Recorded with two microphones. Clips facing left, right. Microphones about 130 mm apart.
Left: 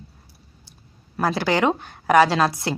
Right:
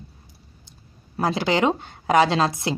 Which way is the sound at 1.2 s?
20° right (ahead or behind).